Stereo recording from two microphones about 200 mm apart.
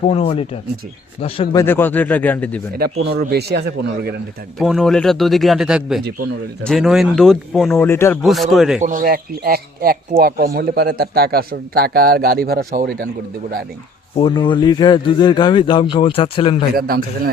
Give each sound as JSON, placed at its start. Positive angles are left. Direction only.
{"t": 0.0, "sound": "speech", "side_deg": 30}
{"t": 1.5, "sound": "speech", "side_deg": 10}
{"t": 2.9, "sound": "speech", "side_deg": -60}
{"t": 4.5, "sound": "speech", "side_deg": 0}
{"t": 7.8, "sound": "speech", "side_deg": 10}
{"t": 8.2, "sound": "speech", "side_deg": 0}
{"t": 8.8, "sound": "speech", "side_deg": -40}
{"t": 14.2, "sound": "speech", "side_deg": 25}
{"t": 16.7, "sound": "speech", "side_deg": -50}